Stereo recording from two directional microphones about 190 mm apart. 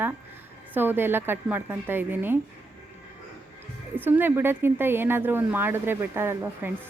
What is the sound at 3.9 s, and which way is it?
Speech, 10° right (ahead or behind).